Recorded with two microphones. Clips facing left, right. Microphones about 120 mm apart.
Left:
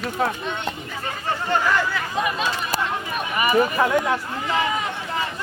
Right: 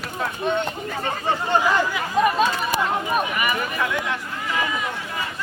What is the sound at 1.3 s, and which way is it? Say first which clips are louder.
Speech: right 1 dB; 15° right (ahead or behind).